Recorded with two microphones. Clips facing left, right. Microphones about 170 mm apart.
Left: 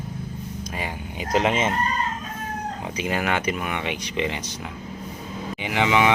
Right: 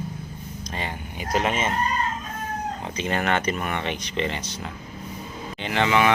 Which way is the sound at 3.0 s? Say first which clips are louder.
Even; 5° left (ahead or behind).